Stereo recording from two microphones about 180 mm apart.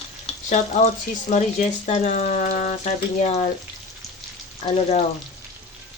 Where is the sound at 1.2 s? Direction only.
40° left (ahead or behind).